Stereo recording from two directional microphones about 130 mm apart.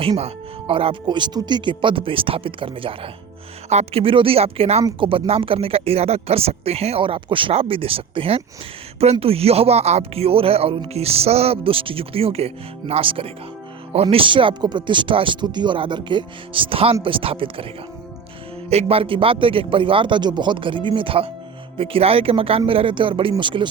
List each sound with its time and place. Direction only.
0.2 s speech: 50° right (ahead or behind)
3.7 s speech: 55° right (ahead or behind)
18.7 s speech: 50° right (ahead or behind)